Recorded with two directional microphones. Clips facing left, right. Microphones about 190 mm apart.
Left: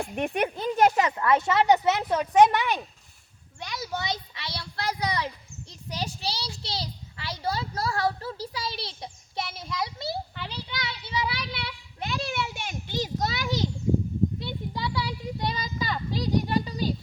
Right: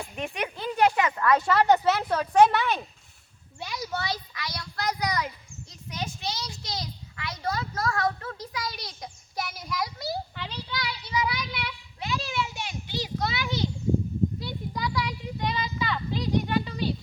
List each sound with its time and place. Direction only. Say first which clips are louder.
0.0 s speech: left 6 dB; 55° left (ahead or behind)
1.1 s speech: even; 25° left (ahead or behind)
3.6 s speech: right 1 dB; centre (ahead or behind)
3.9 s a child's voice: left 1 dB; 20° left (ahead or behind)
10.3 s a child's voice: even; 5° left (ahead or behind)
10.7 s speech: right 2 dB; 20° left (ahead or behind)
11.9 s a sound: even; 50° left (ahead or behind)
14.3 s a sound: left 1 dB; 25° left (ahead or behind)